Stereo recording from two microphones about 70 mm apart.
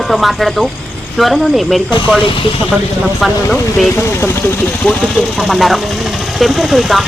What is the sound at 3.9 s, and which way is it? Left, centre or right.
Speech, left.